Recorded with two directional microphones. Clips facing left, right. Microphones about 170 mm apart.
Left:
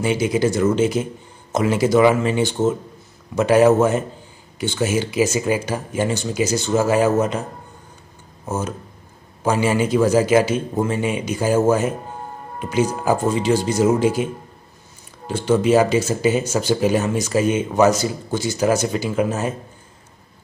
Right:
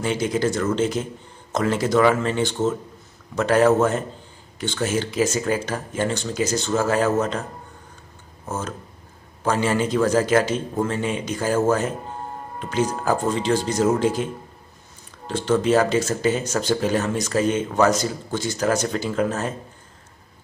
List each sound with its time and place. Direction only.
0.0 s speech: 10° left (ahead or behind)
8.5 s speech: 10° left (ahead or behind)